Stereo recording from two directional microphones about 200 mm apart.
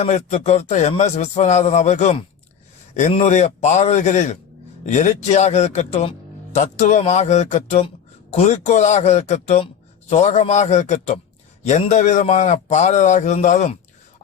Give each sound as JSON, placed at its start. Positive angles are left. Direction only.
{"t": 0.0, "sound": "a man's voice", "side_deg": 35}